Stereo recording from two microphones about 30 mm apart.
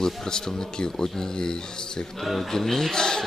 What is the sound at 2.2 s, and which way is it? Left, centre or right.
Speech, centre.